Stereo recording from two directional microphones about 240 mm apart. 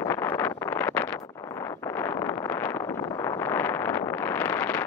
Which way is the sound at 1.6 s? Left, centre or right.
Centre.